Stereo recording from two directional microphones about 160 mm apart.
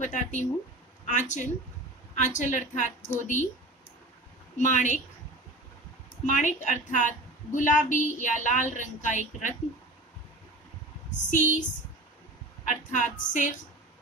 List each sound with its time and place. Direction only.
0.0 s a woman's voice: 50° left (ahead or behind)
4.6 s a woman's voice: 50° left (ahead or behind)
6.2 s a woman's voice: 50° left (ahead or behind)
11.2 s a woman's voice: 50° left (ahead or behind)
12.6 s a woman's voice: 50° left (ahead or behind)